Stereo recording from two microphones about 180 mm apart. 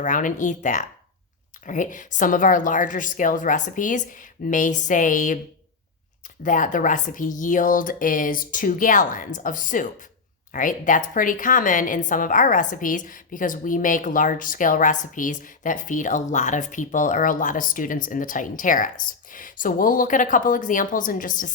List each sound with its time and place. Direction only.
0.0 s a woman's voice: 45° left (ahead or behind)
6.4 s a woman's voice: 45° left (ahead or behind)